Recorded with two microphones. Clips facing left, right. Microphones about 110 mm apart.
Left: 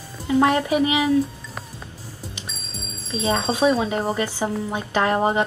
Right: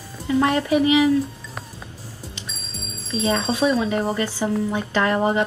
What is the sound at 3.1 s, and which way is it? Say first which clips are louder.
Speech: right 1 dB; 30° left (ahead or behind).